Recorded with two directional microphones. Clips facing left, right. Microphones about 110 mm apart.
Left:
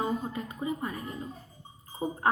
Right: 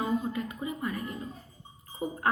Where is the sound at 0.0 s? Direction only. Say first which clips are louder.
Right 2 dB; 30° left (ahead or behind).